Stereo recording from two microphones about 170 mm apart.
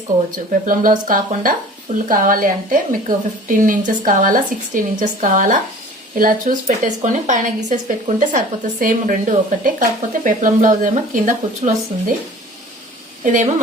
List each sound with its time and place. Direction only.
0.6 s a woman's voice: 55° right (ahead or behind)
13.2 s a woman's voice: 50° right (ahead or behind)